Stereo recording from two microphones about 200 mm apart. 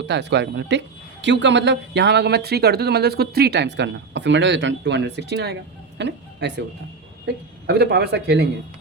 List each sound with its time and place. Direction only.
0.1 s speech: 60° right (ahead or behind)